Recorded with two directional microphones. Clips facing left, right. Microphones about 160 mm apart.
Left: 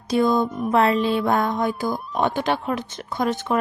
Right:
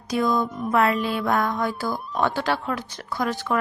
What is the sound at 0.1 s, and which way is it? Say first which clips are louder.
A woman's voice: left 3 dB; 25° left (ahead or behind).